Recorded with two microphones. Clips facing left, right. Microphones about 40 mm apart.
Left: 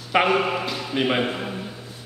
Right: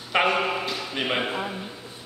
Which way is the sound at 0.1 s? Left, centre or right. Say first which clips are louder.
Left 3 dB; centre.